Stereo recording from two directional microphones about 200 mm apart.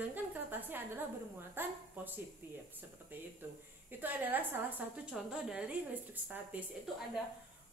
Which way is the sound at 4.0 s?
10° right (ahead or behind).